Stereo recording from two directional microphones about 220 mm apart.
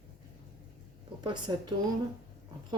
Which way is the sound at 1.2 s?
20° right (ahead or behind).